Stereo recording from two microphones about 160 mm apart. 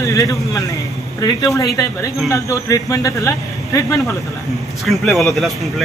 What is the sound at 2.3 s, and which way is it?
Speech, 20° left (ahead or behind).